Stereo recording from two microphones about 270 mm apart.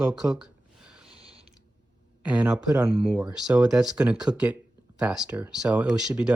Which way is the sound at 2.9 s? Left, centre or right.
Right.